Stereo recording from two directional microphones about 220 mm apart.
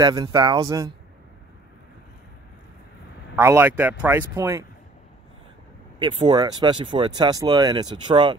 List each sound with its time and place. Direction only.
0.0 s speech: 15° right (ahead or behind)
3.3 s speech: 10° right (ahead or behind)
5.9 s speech: 20° right (ahead or behind)